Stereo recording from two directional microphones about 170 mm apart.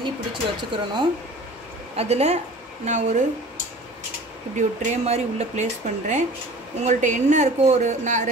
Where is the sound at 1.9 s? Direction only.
40° right (ahead or behind).